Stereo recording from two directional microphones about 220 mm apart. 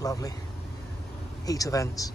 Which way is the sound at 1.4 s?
15° left (ahead or behind).